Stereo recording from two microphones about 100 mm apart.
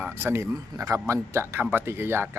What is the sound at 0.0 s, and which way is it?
Speech, 20° right (ahead or behind).